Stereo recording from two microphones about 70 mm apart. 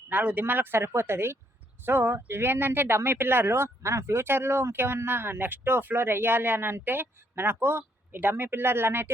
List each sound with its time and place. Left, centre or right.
0.1 s speech: right